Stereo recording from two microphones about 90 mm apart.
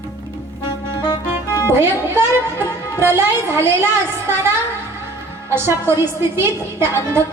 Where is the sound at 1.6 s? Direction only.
25° right (ahead or behind).